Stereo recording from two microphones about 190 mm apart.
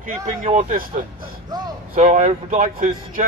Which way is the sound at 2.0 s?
35° right (ahead or behind).